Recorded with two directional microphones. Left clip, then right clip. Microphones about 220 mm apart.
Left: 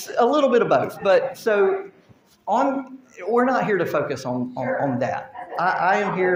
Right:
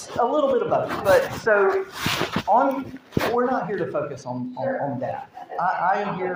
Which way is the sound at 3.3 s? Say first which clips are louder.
Left 7 dB; 45° left (ahead or behind).